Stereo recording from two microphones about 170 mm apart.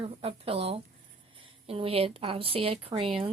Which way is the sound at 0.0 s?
35° right (ahead or behind).